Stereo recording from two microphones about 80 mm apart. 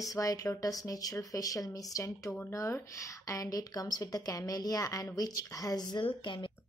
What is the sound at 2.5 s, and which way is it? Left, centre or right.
Speech, left.